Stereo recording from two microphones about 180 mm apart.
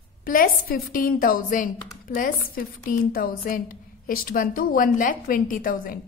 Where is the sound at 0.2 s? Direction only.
55° left (ahead or behind).